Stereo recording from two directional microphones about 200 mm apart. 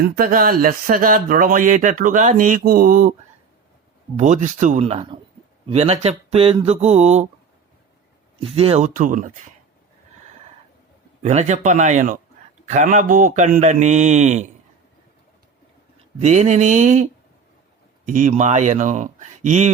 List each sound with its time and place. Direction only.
0.0 s speech: 45° right (ahead or behind)
4.2 s speech: 40° right (ahead or behind)
8.4 s speech: 30° right (ahead or behind)
11.2 s speech: 35° right (ahead or behind)
16.1 s speech: 35° right (ahead or behind)